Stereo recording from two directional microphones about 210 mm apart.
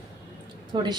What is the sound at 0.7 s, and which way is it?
Speech, 20° right (ahead or behind).